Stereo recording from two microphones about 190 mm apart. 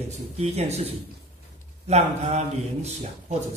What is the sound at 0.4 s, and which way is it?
Speech, 35° right (ahead or behind).